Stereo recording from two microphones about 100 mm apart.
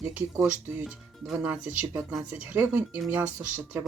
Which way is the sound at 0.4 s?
15° right (ahead or behind).